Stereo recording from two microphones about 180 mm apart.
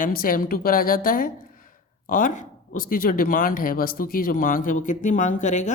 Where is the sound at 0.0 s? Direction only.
55° left (ahead or behind).